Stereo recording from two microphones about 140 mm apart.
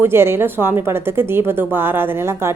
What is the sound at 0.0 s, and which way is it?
A woman's voice, 15° right (ahead or behind).